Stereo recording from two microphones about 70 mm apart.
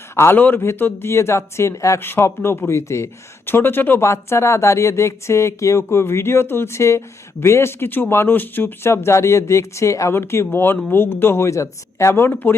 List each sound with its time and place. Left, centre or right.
0.3 s speech: left
4.0 s speech: left
10.2 s speech: left